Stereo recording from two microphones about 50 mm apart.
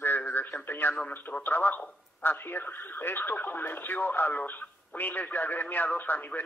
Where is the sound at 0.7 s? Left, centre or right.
Left.